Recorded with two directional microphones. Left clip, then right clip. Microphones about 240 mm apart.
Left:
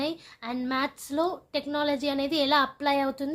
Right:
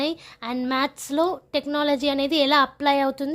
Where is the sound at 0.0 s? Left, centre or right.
Right.